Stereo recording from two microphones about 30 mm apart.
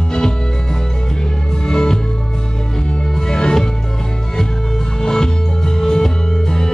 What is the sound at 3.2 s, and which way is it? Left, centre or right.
Music, left.